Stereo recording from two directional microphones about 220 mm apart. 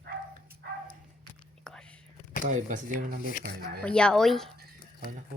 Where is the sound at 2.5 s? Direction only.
35° right (ahead or behind).